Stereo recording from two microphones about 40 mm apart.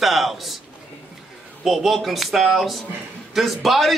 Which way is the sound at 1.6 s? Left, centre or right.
Centre.